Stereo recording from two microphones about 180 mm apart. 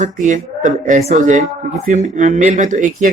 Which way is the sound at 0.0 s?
45° right (ahead or behind).